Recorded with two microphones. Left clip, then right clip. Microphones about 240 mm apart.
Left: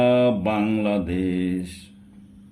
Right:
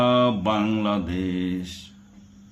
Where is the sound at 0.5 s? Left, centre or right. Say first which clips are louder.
Even; centre.